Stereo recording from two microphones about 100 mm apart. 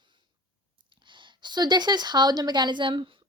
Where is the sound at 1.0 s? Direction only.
55° right (ahead or behind).